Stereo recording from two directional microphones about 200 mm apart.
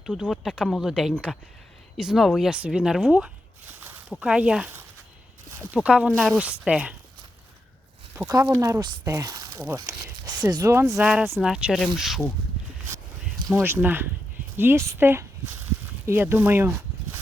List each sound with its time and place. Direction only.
0.0 s speech: centre (ahead or behind)
8.1 s speech: 15° right (ahead or behind)
10.9 s speech: centre (ahead or behind)
13.5 s speech: 10° right (ahead or behind)